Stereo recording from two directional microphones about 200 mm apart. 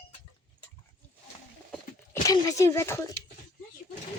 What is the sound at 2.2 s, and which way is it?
Speech, 15° left (ahead or behind).